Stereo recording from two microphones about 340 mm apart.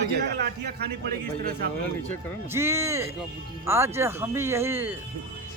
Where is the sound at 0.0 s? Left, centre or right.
Right.